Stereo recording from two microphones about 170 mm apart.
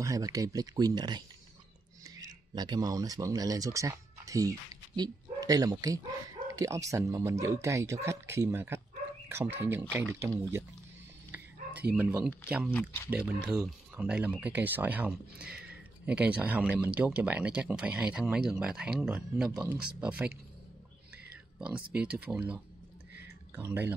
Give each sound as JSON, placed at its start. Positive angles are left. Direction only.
{"t": 0.0, "sound": "speech", "side_deg": -20}
{"t": 11.9, "sound": "speech", "side_deg": -10}
{"t": 21.5, "sound": "speech", "side_deg": -5}
{"t": 23.2, "sound": "a sound", "side_deg": -15}